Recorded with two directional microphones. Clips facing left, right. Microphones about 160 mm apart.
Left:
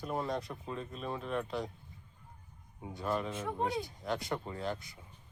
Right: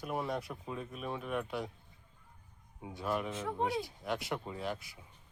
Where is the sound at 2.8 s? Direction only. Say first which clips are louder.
Left 1 dB; 5° right (ahead or behind).